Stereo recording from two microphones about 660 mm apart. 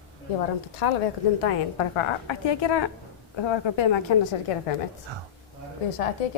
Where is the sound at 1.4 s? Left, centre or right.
Left.